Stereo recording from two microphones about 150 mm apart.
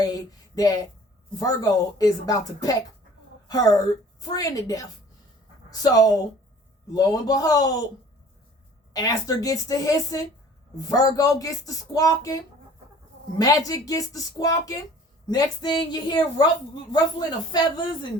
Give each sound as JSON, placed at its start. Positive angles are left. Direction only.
{"t": 0.0, "sound": "a sound", "side_deg": 25}
{"t": 1.4, "sound": "speech", "side_deg": 25}
{"t": 8.9, "sound": "speech", "side_deg": 25}
{"t": 13.4, "sound": "speech", "side_deg": 25}